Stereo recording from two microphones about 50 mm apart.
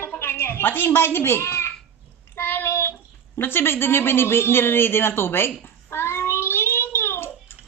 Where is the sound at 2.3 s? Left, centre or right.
Left.